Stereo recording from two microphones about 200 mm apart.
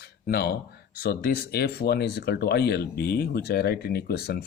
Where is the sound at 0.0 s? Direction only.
50° left (ahead or behind).